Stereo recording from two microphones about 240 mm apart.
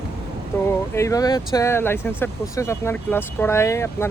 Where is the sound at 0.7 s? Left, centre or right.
Centre.